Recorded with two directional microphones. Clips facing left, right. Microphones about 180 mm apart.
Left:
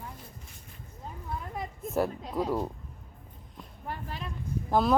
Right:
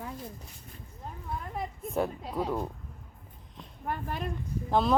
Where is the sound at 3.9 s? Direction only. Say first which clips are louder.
Right 4 dB; 50° right (ahead or behind).